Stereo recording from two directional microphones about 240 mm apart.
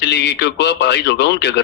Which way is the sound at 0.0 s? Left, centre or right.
Left.